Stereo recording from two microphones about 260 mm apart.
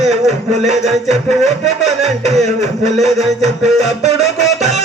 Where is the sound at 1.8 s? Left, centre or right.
Right.